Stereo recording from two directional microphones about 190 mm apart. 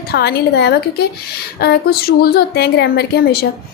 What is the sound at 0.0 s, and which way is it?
A woman's voice, 55° left (ahead or behind).